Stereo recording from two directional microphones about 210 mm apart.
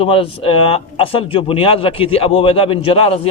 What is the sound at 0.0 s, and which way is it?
Speech, 25° left (ahead or behind).